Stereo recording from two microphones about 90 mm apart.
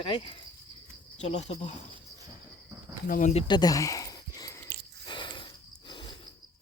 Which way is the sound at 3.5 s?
45° left (ahead or behind).